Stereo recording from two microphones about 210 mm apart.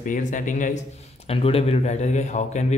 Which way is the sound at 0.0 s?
40° left (ahead or behind).